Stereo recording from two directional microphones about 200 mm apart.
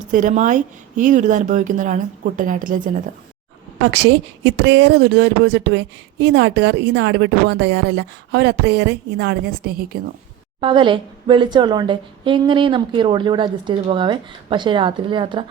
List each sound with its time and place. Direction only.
0.0 s speech: 40° right (ahead or behind)
3.9 s speech: 60° right (ahead or behind)
10.6 s a woman's voice: 25° right (ahead or behind)